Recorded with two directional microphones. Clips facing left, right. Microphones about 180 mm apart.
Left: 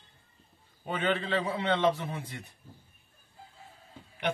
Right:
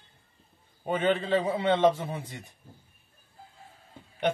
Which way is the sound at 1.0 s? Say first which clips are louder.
Right 4 dB; 45° right (ahead or behind).